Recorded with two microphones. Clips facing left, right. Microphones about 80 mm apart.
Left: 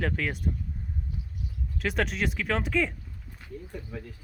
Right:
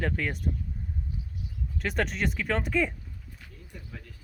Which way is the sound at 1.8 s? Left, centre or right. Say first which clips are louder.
Left 1 dB; centre.